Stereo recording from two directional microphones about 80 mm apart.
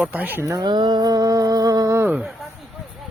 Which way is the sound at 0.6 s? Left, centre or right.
Right.